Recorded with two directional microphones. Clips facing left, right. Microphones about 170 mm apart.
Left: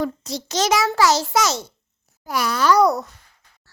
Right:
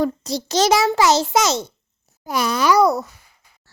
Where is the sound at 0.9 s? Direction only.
20° right (ahead or behind).